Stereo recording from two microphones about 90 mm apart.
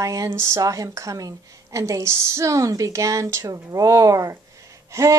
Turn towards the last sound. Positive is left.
turn(degrees=-35)  # may be behind; listen again after turning